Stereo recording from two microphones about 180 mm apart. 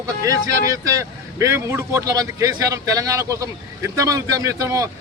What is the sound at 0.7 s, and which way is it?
Speech, 15° right (ahead or behind).